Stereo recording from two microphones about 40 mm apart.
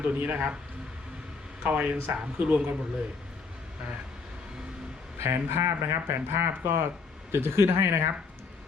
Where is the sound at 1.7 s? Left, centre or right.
Right.